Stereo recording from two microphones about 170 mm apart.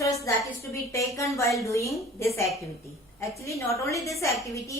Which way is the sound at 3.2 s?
15° left (ahead or behind).